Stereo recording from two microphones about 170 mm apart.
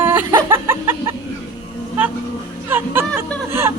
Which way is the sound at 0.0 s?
15° right (ahead or behind).